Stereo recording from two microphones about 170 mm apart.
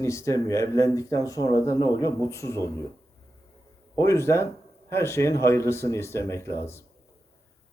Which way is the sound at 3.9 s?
15° left (ahead or behind).